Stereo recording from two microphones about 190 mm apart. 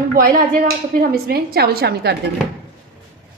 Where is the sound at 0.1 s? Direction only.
50° right (ahead or behind).